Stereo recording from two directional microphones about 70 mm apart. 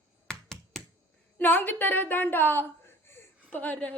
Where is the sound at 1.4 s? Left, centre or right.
Left.